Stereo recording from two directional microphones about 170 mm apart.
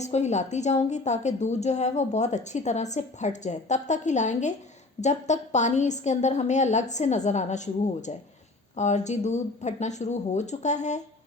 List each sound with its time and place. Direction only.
0.0 s a woman's voice: 40° left (ahead or behind)